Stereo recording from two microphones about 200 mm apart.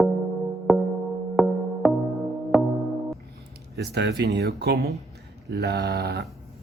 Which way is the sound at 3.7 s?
55° right (ahead or behind).